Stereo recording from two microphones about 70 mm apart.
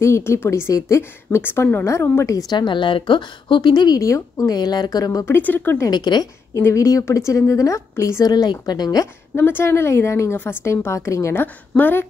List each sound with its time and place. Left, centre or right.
0.0 s a woman's voice: left
1.4 s speech: left
1.9 s a woman's voice: left
2.5 s a woman's voice: left
4.0 s a woman's voice: left
4.6 s a woman's voice: left
5.2 s speech: left
5.9 s a woman's voice: left
6.5 s a woman's voice: left
8.2 s a woman's voice: left
9.3 s a woman's voice: left
10.3 s a woman's voice: left
10.9 s a woman's voice: left
11.7 s speech: left